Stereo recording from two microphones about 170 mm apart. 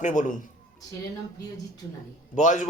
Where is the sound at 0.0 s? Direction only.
45° left (ahead or behind).